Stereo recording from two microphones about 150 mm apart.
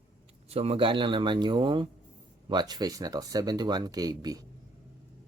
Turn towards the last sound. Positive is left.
turn(degrees=-25)  # may be behind; listen again after turning